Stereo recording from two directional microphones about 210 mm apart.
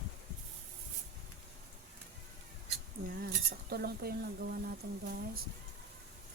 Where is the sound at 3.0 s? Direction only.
45° right (ahead or behind).